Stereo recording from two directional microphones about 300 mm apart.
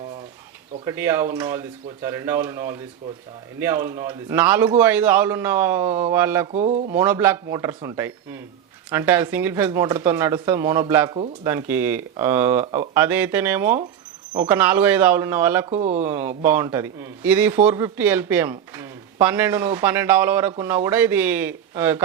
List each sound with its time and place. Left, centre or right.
0.9 s a man's voice: centre
6.5 s speech: right
6.9 s a man's voice: centre
15.7 s speech: right
16.0 s a man's voice: centre